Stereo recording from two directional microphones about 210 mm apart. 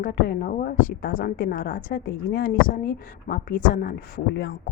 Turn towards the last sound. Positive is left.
turn(degrees=55)  # may be behind; listen again after turning